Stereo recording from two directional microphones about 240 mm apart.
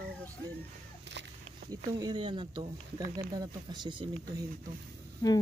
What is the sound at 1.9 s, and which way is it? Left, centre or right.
Speech, centre.